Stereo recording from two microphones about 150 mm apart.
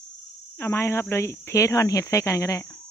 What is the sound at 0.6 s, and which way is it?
Speech, 15° left (ahead or behind).